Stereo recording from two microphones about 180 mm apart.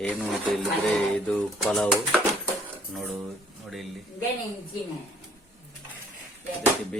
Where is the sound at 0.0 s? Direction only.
5° left (ahead or behind).